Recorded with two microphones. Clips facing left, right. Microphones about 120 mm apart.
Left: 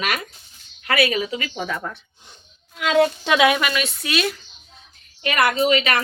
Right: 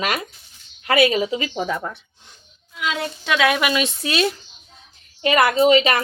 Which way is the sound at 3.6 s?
20° right (ahead or behind).